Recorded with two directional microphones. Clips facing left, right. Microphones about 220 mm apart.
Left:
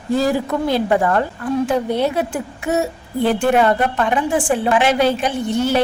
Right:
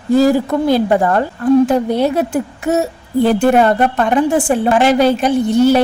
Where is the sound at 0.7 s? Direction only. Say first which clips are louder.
Right 3 dB; 40° right (ahead or behind).